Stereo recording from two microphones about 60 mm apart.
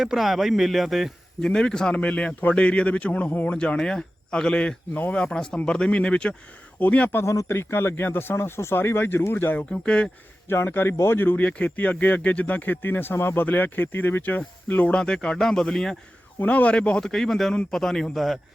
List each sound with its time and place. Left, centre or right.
0.0 s speech: centre
1.4 s speech: centre
3.6 s speech: centre
7.3 s speech: left
9.6 s speech: centre
10.5 s speech: left
14.9 s speech: centre
16.4 s speech: left
17.0 s speech: centre